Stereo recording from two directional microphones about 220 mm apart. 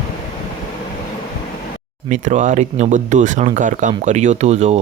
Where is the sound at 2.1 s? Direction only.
35° right (ahead or behind).